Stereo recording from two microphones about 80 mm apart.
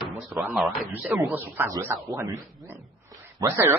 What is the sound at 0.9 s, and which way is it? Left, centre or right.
Speech, right.